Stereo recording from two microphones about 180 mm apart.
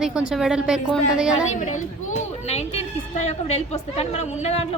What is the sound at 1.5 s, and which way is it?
Speech, 45° left (ahead or behind).